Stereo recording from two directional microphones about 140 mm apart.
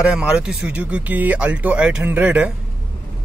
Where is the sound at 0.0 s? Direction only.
10° right (ahead or behind).